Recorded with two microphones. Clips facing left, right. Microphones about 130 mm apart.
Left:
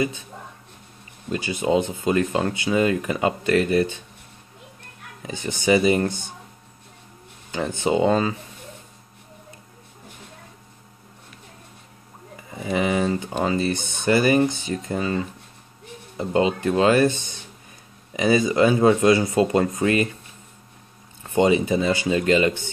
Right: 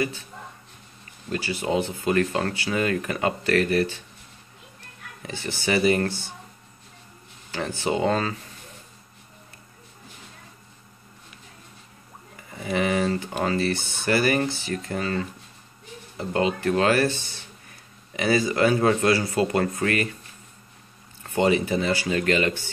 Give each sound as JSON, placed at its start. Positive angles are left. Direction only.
{"t": 1.3, "sound": "speech", "side_deg": 20}
{"t": 5.2, "sound": "speech", "side_deg": 15}
{"t": 7.5, "sound": "speech", "side_deg": 20}
{"t": 12.5, "sound": "speech", "side_deg": 20}
{"t": 21.2, "sound": "speech", "side_deg": 20}